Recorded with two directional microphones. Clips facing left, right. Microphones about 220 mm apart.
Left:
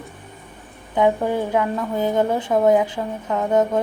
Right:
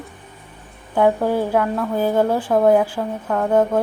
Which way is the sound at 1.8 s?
10° right (ahead or behind).